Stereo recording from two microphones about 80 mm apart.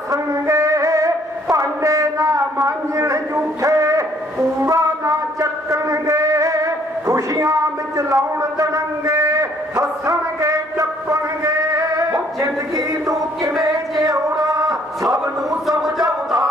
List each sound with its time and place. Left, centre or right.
0.1 s a sound: right
12.1 s music: right
15.8 s music: centre